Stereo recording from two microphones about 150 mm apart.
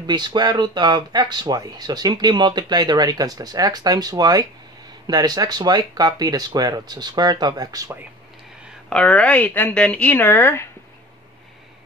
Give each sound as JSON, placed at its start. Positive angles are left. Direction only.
{"t": 0.0, "sound": "speech", "side_deg": -30}
{"t": 8.8, "sound": "speech", "side_deg": 5}